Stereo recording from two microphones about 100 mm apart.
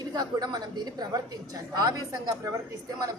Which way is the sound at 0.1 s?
45° right (ahead or behind).